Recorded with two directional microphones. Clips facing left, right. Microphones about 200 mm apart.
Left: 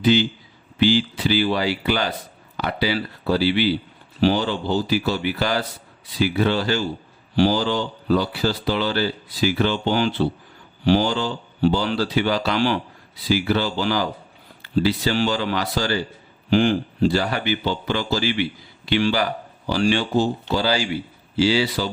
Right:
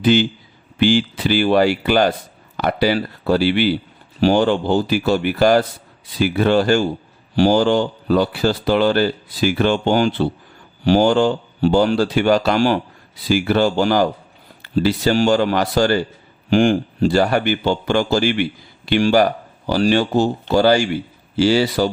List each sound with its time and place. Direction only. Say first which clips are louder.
0.0 s speech: right 3 dB; 50° right (ahead or behind)